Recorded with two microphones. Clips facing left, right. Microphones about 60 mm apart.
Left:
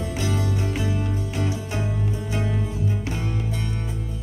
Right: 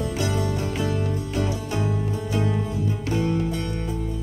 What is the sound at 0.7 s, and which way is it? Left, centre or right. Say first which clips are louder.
Music: right 1 dB; centre.